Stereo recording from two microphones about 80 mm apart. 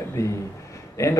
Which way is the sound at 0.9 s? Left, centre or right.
Left.